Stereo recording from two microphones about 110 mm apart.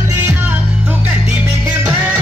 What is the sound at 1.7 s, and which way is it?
Music, 10° right (ahead or behind).